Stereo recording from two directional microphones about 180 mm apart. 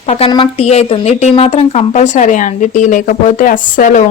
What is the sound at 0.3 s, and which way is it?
Speech, 30° left (ahead or behind).